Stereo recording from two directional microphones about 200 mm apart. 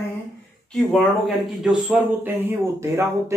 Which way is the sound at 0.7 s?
Centre (ahead or behind).